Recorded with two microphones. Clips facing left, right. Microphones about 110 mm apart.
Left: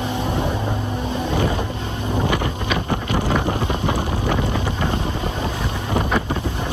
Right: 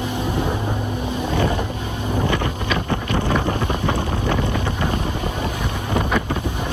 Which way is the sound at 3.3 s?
25° left (ahead or behind).